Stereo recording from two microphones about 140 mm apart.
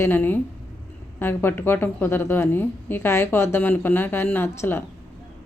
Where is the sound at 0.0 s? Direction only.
15° left (ahead or behind).